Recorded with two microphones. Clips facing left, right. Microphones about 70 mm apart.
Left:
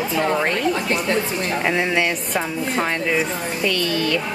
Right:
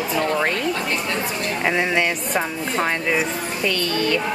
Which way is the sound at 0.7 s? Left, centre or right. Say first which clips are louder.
Left 3 dB; left.